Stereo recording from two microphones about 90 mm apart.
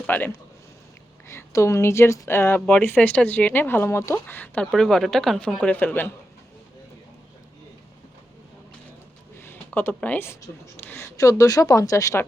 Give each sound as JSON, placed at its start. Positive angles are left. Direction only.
{"t": 0.0, "sound": "speech", "side_deg": 20}
{"t": 1.3, "sound": "speech", "side_deg": 30}
{"t": 2.6, "sound": "speech", "side_deg": 10}
{"t": 3.0, "sound": "speech", "side_deg": 20}
{"t": 4.6, "sound": "speech", "side_deg": 5}
{"t": 5.5, "sound": "speech", "side_deg": 15}
{"t": 9.4, "sound": "a sound", "side_deg": 25}
{"t": 10.8, "sound": "speech", "side_deg": 25}
{"t": 11.2, "sound": "speech", "side_deg": 40}